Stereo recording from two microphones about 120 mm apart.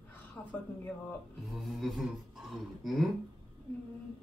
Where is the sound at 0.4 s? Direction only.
15° left (ahead or behind).